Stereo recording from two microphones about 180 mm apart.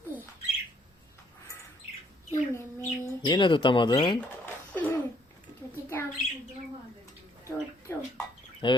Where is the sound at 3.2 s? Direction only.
25° left (ahead or behind).